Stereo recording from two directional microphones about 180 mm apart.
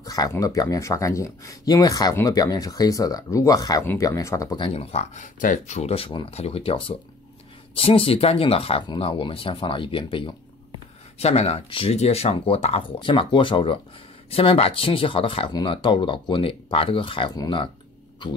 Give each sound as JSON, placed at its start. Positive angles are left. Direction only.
{"t": 0.0, "sound": "speech", "side_deg": 20}